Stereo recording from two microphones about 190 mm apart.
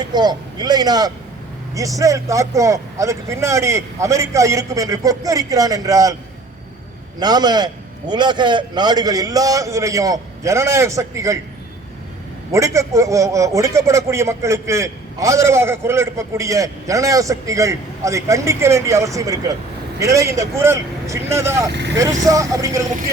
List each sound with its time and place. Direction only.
0.0 s a man's voice: 20° right (ahead or behind)
7.2 s a man's voice: 20° right (ahead or behind)
12.5 s a man's voice: 15° right (ahead or behind)
21.7 s speech: 65° right (ahead or behind)
21.9 s a man's voice: 15° right (ahead or behind)